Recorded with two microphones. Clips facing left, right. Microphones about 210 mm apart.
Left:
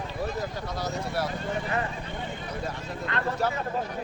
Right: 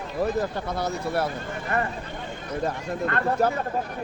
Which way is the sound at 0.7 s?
55° right (ahead or behind).